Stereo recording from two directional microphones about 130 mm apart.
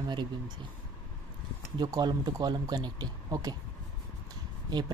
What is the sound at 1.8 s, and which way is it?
A man's voice, 30° right (ahead or behind).